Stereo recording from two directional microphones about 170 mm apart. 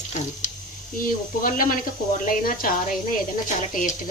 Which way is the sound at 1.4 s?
55° left (ahead or behind).